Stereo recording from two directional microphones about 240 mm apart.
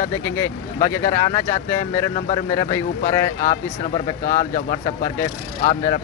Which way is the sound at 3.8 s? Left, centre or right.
Left.